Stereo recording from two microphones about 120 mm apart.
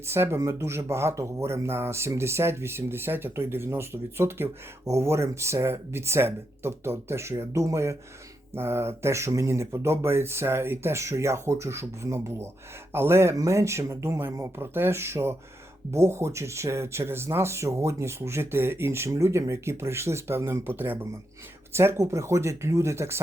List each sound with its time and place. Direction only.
0.0 s speech: 20° right (ahead or behind)